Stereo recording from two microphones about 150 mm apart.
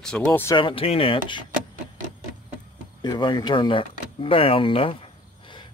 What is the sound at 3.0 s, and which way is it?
Speech, 30° left (ahead or behind).